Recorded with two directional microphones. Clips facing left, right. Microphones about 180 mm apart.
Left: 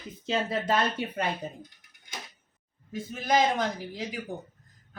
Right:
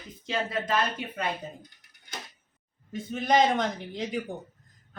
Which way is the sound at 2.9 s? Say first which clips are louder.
Right 2 dB; centre (ahead or behind).